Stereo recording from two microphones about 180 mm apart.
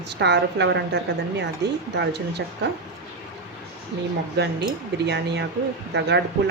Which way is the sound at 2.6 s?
70° right (ahead or behind).